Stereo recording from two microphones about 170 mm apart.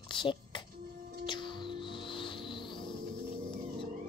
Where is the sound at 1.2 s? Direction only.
25° left (ahead or behind).